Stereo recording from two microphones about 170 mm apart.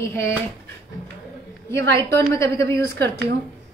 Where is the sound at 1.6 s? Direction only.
15° left (ahead or behind).